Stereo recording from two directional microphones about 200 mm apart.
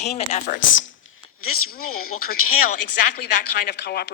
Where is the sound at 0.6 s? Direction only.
70° left (ahead or behind).